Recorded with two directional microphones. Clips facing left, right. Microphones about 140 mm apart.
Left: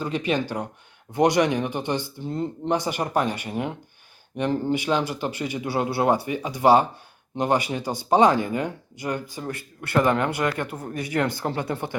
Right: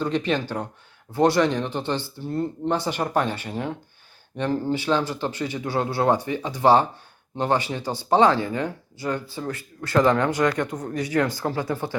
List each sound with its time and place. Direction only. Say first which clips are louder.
0.0 s speech: right 1 dB; 10° left (ahead or behind)
10.8 s speech: right 1 dB; 25° left (ahead or behind)